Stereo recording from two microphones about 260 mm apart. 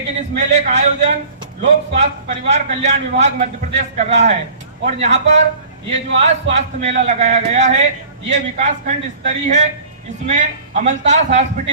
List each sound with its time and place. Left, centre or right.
0.2 s a man's voice: right